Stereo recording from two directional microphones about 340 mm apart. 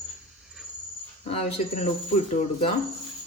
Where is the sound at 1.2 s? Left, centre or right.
Centre.